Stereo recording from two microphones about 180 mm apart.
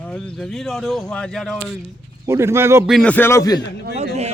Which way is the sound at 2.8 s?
5° left (ahead or behind).